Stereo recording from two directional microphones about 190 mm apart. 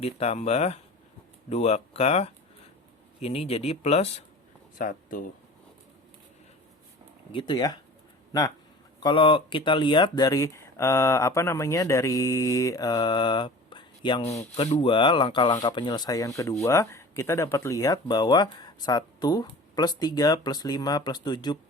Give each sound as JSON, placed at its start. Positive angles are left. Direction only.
{"t": 0.0, "sound": "speech", "side_deg": 35}
{"t": 4.8, "sound": "speech", "side_deg": 45}
{"t": 7.3, "sound": "speech", "side_deg": 25}